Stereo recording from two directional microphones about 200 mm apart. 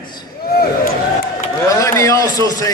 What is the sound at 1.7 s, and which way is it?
A man's voice, 15° left (ahead or behind).